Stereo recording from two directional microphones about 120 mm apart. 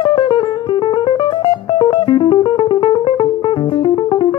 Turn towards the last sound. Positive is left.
turn(degrees=40)  # may be behind; listen again after turning